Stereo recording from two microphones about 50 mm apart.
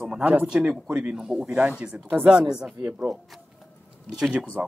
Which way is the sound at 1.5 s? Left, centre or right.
Right.